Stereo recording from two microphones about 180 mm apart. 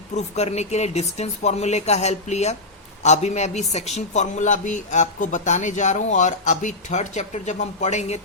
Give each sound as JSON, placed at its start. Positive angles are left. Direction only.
{"t": 0.1, "sound": "speech", "side_deg": 40}